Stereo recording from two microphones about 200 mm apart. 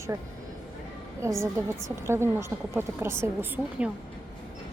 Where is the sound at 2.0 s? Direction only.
10° right (ahead or behind).